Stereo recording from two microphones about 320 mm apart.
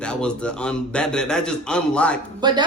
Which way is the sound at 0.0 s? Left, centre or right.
Centre.